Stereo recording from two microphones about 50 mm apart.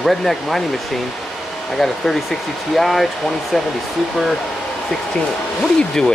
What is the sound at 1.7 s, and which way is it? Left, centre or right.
Speech, centre.